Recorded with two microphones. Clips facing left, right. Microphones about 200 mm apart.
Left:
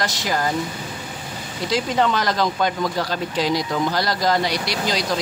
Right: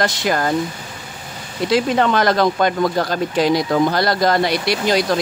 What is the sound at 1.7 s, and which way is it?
Speech, 60° right (ahead or behind).